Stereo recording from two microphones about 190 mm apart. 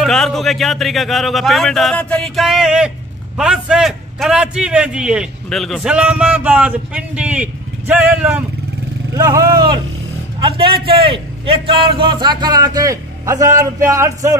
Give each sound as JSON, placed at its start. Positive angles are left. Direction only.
{"t": 0.0, "sound": "a man's voice", "side_deg": 0}
{"t": 9.1, "sound": "speech", "side_deg": -15}
{"t": 10.9, "sound": "speech", "side_deg": -30}